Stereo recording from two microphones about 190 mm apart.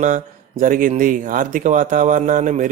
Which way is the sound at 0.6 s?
45° right (ahead or behind).